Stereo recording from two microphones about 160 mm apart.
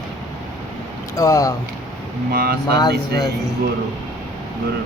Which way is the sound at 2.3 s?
70° right (ahead or behind).